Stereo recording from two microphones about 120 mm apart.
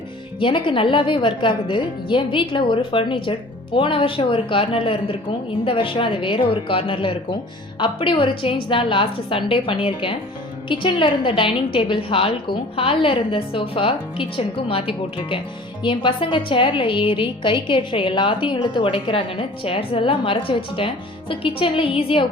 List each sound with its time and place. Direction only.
0.3 s a woman's voice: 45° left (ahead or behind)